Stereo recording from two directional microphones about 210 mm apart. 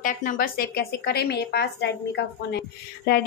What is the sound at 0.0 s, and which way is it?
A woman's voice, 40° left (ahead or behind).